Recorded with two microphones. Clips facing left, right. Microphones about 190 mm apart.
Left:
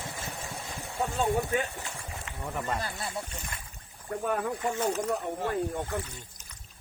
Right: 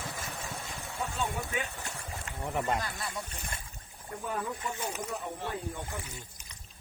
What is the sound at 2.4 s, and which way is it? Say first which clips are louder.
Speech: right 2 dB; 20° right (ahead or behind).